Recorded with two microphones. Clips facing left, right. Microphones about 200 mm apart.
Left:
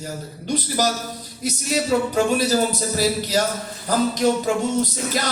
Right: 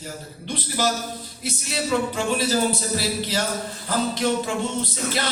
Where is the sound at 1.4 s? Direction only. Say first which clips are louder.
Left 5 dB; 40° left (ahead or behind).